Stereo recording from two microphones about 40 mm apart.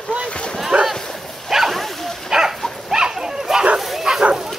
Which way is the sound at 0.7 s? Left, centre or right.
Right.